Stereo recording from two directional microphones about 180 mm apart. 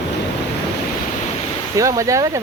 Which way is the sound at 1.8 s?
20° right (ahead or behind).